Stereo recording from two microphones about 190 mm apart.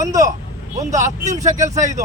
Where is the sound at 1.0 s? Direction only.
40° right (ahead or behind).